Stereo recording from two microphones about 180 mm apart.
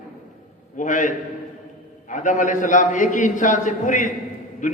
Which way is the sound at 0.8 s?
45° left (ahead or behind).